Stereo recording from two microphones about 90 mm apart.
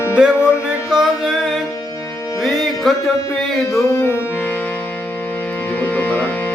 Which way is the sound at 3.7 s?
30° left (ahead or behind).